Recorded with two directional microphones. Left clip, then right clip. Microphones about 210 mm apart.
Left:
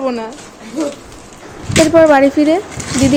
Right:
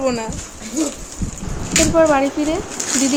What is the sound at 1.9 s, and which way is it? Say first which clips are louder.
Speech: left 7 dB; 25° left (ahead or behind).